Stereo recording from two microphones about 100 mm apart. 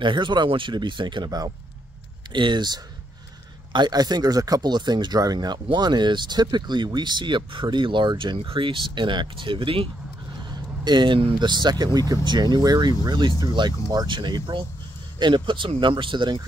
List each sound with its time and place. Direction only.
0.0 s speech: 50° right (ahead or behind)
10.5 s speech: 45° right (ahead or behind)